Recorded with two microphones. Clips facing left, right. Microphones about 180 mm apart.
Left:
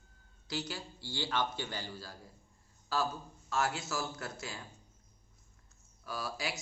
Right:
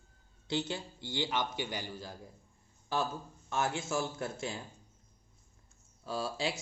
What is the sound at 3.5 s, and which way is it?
A man's voice, 25° right (ahead or behind).